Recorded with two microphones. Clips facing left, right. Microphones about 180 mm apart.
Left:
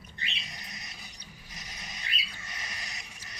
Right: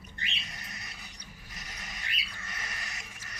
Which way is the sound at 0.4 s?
15° left (ahead or behind).